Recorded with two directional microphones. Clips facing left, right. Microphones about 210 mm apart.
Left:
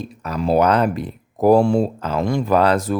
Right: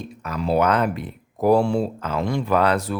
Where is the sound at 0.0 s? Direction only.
35° left (ahead or behind).